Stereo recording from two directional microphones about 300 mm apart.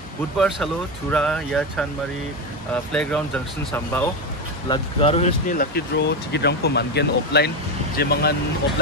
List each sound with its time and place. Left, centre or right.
1.1 s speech: centre; by 8.4 s left